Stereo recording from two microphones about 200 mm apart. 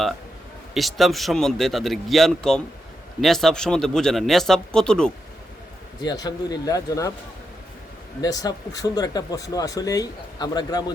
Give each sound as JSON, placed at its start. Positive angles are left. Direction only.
{"t": 0.7, "sound": "a man's voice", "side_deg": 0}
{"t": 6.0, "sound": "speech", "side_deg": 20}
{"t": 8.2, "sound": "speech", "side_deg": 20}